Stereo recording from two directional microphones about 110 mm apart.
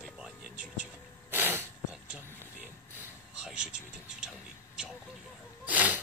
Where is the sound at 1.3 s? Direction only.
20° right (ahead or behind).